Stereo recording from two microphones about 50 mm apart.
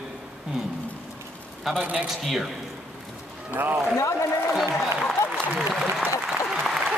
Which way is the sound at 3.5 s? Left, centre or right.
Right.